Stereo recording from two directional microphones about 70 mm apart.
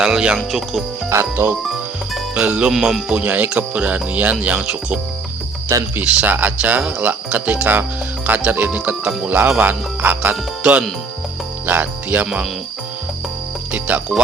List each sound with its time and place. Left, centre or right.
0.0 s speech: centre
0.3 s speech: centre
1.1 s speech: right
2.3 s speech: centre
2.7 s speech: centre
5.7 s speech: right
6.1 s speech: centre
10.6 s speech: centre
11.6 s speech: right
13.7 s speech: right